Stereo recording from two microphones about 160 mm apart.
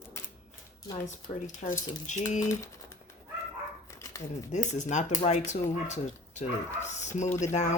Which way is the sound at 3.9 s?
20° left (ahead or behind).